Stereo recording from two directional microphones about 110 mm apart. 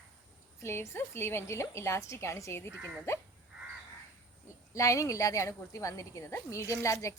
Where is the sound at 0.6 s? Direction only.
20° left (ahead or behind).